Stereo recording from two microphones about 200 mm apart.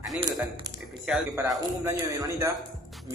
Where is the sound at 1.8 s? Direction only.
15° right (ahead or behind).